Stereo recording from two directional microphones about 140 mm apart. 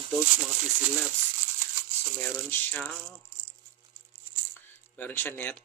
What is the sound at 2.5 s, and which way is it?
Speech, 15° left (ahead or behind).